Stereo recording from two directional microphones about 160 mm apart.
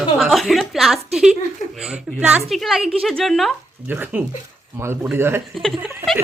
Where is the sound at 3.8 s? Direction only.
10° right (ahead or behind).